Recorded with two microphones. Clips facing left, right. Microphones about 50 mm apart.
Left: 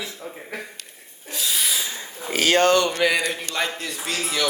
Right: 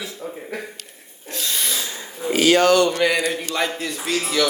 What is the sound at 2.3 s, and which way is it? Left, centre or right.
Speech, left.